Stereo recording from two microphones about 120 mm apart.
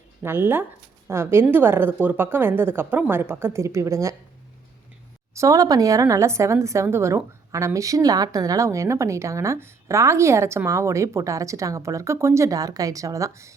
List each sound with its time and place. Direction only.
0.2 s a woman's voice: 20° right (ahead or behind)
5.3 s a woman's voice: 25° right (ahead or behind)